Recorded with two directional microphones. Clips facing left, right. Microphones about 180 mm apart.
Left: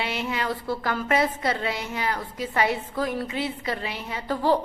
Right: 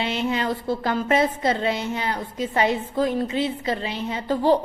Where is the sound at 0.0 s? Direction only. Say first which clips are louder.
Right 4 dB; 25° right (ahead or behind).